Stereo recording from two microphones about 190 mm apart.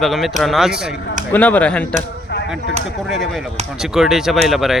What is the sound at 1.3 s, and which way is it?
Speech, 10° left (ahead or behind).